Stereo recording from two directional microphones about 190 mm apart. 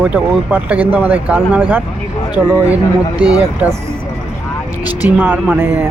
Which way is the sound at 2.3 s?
15° left (ahead or behind).